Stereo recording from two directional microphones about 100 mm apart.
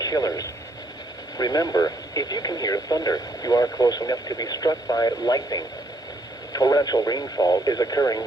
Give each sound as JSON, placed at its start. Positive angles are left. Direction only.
{"t": 0.0, "sound": "speech", "side_deg": 35}